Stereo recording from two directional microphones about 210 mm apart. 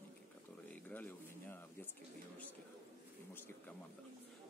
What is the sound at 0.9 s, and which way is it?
Speech, 10° left (ahead or behind).